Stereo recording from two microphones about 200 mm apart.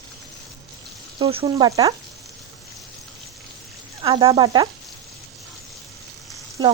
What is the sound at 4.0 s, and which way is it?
Speech, 25° right (ahead or behind).